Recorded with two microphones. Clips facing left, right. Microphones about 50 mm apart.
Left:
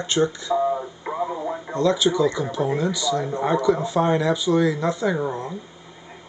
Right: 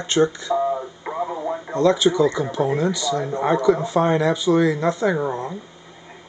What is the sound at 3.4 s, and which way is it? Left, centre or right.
Speech, centre.